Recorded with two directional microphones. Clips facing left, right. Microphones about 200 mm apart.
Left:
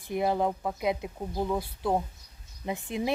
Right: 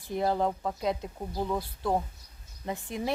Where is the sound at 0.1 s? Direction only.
15° left (ahead or behind).